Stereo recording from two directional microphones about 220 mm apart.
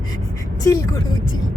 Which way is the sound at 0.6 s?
15° left (ahead or behind).